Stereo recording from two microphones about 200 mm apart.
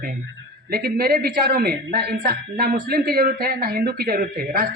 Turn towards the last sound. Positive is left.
turn(degrees=-50)  # may be behind; listen again after turning